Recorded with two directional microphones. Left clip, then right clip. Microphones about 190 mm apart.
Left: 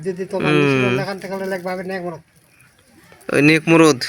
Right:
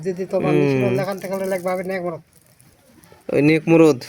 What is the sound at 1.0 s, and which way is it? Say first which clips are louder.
A man's voice: right 1 dB; 10° right (ahead or behind).